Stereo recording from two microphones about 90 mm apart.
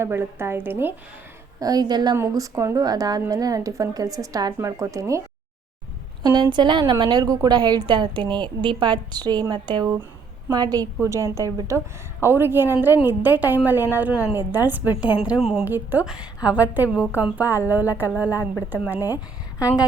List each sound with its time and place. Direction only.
0.0 s a woman's voice: 25° right (ahead or behind)
1.5 s a woman's voice: 45° right (ahead or behind)
2.1 s speech: 40° right (ahead or behind)
6.2 s a woman's voice: 55° right (ahead or behind)
7.0 s a woman's voice: 45° right (ahead or behind)
11.0 s speech: 35° right (ahead or behind)
12.2 s a woman's voice: 25° right (ahead or behind)
14.1 s a woman's voice: 10° right (ahead or behind)
14.3 s a woman's voice: 25° right (ahead or behind); by 15.6 s 5° right (ahead or behind)
15.6 s a woman's voice: 20° right (ahead or behind)